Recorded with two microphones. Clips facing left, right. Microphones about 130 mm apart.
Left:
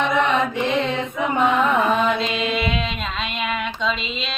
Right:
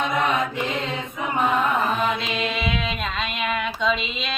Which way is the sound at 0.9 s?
90° left.